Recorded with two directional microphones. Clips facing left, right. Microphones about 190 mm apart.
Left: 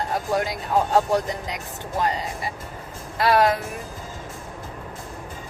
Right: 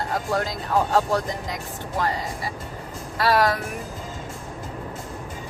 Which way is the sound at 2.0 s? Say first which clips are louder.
Left 1 dB; 20° left (ahead or behind).